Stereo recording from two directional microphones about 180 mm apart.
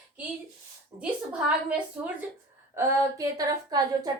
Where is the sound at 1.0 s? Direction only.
5° right (ahead or behind).